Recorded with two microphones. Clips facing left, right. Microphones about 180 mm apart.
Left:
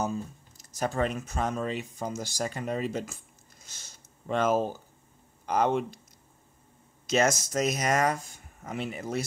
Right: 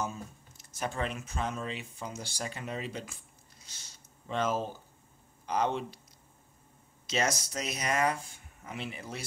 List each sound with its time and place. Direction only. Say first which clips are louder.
0.0 s speech: left 6 dB; 40° left (ahead or behind)
7.1 s speech: left 6 dB; 45° left (ahead or behind)